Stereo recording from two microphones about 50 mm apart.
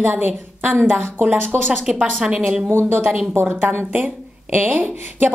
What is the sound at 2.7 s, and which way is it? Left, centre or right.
Speech, right.